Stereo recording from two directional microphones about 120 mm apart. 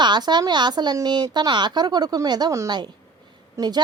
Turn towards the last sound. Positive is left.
turn(degrees=-35)  # may be behind; listen again after turning